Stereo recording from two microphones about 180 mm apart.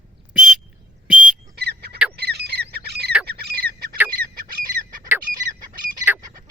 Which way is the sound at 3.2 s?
60° right (ahead or behind).